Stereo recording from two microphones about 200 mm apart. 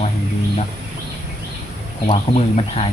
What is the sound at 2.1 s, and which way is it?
Speech, 30° left (ahead or behind).